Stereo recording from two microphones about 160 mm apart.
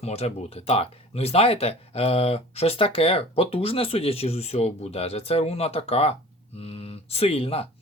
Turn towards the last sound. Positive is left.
turn(degrees=40)  # may be behind; listen again after turning